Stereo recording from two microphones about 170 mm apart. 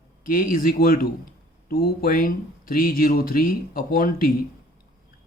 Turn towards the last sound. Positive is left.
turn(degrees=55)  # may be behind; listen again after turning